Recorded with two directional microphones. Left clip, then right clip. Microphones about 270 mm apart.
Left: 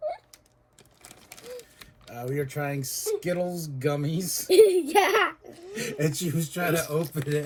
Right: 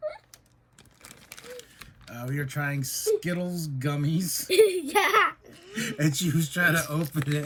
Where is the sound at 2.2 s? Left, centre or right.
Centre.